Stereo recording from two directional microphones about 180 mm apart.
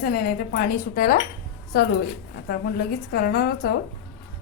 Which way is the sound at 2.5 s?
60° left (ahead or behind).